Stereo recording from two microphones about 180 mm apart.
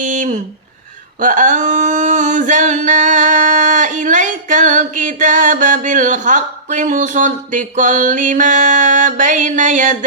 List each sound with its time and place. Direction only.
0.0 s speech: 45° right (ahead or behind)
1.2 s singing: 45° right (ahead or behind)